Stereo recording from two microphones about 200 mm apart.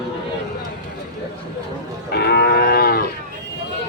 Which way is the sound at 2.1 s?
55° left (ahead or behind).